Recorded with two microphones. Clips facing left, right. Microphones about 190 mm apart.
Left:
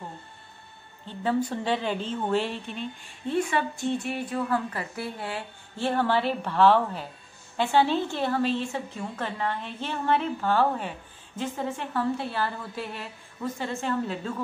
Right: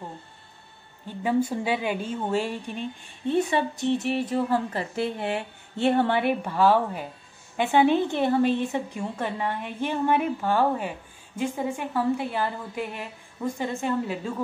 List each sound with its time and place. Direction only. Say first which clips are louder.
1.0 s a woman's voice: right 2 dB; 10° right (ahead or behind)
6.4 s a woman's voice: left 3 dB; 10° right (ahead or behind)